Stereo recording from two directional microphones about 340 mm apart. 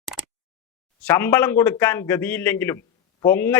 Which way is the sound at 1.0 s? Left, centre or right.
Centre.